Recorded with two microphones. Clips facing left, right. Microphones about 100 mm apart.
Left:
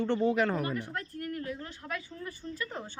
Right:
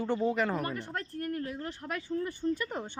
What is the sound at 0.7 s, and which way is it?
Speech, 40° right (ahead or behind).